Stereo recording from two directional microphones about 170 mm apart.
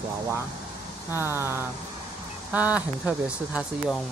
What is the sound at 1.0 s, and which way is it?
Speech, 15° right (ahead or behind).